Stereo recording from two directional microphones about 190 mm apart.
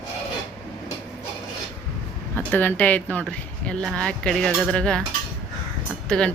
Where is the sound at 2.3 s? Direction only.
10° left (ahead or behind).